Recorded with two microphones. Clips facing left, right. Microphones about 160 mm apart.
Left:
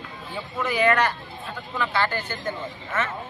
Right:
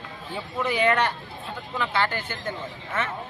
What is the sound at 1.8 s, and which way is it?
Speech, 15° right (ahead or behind).